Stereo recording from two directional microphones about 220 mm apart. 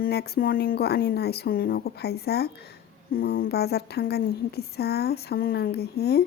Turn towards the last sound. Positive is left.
turn(degrees=45)  # may be behind; listen again after turning